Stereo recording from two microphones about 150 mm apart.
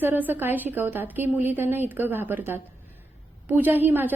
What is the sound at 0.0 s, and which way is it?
A woman's voice, 15° right (ahead or behind).